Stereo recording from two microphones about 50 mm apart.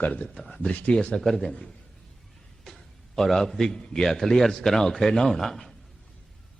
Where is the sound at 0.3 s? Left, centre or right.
Centre.